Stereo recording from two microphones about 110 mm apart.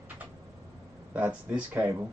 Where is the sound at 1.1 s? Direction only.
15° right (ahead or behind).